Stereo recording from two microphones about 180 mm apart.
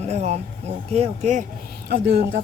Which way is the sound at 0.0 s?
40° right (ahead or behind).